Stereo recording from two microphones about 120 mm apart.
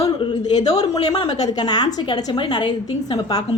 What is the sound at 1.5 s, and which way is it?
A woman's voice, 35° left (ahead or behind).